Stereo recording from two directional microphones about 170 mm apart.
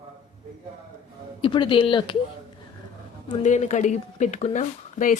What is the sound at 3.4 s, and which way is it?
Speech, 40° left (ahead or behind).